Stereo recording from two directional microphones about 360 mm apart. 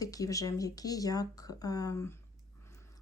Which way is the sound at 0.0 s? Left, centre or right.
Centre.